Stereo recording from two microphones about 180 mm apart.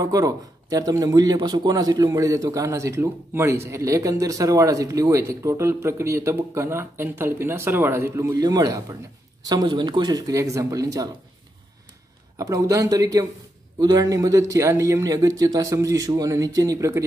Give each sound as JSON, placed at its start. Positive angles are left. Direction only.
{"t": 0.0, "sound": "a man's voice", "side_deg": -20}
{"t": 12.4, "sound": "a man's voice", "side_deg": -20}